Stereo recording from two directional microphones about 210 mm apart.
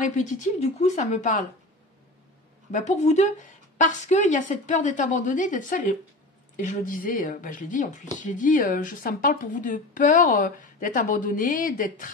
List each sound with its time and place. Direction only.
0.0 s speech: 35° left (ahead or behind)
2.7 s speech: 35° left (ahead or behind)